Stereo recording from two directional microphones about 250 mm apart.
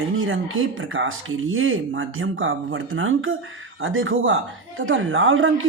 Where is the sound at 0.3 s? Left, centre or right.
Right.